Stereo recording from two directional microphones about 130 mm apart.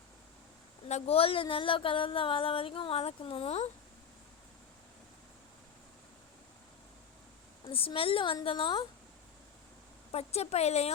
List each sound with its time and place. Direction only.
0.9 s speech: 55° left (ahead or behind)
7.7 s speech: 45° left (ahead or behind)
10.1 s speech: 50° left (ahead or behind)